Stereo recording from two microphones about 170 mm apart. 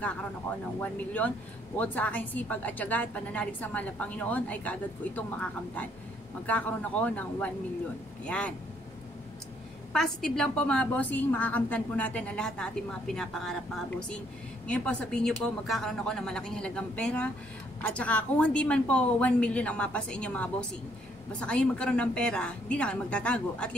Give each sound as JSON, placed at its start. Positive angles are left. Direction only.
{"t": 0.7, "sound": "a woman's voice", "side_deg": 10}
{"t": 9.9, "sound": "a woman's voice", "side_deg": 5}